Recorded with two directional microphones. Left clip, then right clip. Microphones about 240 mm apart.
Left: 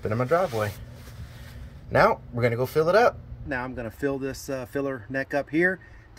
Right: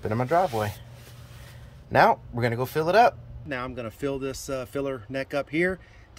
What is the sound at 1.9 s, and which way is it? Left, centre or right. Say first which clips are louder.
Speech: right 1 dB; centre.